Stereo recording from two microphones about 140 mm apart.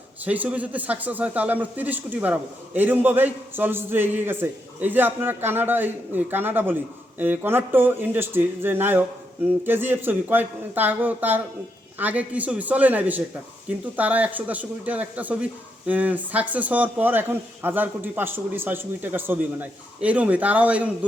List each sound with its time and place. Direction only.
0.3 s a man's voice: 10° right (ahead or behind)